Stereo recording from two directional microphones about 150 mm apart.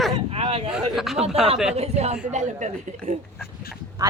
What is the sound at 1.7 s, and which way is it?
Speech, 45° right (ahead or behind).